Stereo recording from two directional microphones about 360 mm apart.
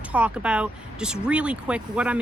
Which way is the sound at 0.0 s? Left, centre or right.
Centre.